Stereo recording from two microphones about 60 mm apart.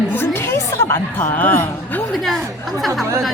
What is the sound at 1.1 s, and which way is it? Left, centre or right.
Speech, left.